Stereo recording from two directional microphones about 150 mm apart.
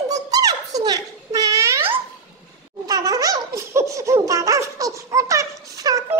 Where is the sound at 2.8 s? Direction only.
25° right (ahead or behind).